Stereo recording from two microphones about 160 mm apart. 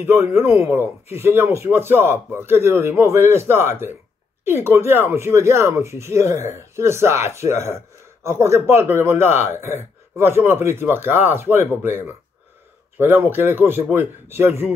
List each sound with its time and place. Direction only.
0.0 s speech: 15° right (ahead or behind)